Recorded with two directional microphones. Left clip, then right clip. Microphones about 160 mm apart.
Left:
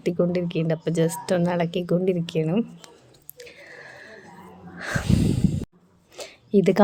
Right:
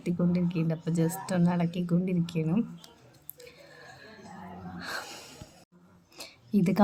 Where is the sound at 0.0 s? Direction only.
40° left (ahead or behind).